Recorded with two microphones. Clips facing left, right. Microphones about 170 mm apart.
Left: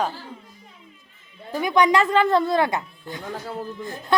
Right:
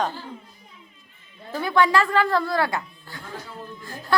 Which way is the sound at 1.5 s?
15° left (ahead or behind).